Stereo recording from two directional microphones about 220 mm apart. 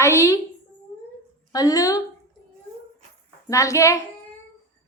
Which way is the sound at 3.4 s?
15° left (ahead or behind).